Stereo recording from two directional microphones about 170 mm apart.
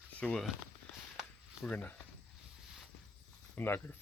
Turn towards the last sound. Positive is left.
turn(degrees=10)  # may be behind; listen again after turning